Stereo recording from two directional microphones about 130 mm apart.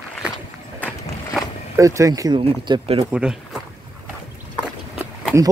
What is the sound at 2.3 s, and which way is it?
Speech, 40° right (ahead or behind).